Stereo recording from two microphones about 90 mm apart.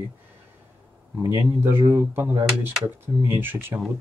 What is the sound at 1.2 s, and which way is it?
Speech, 25° right (ahead or behind).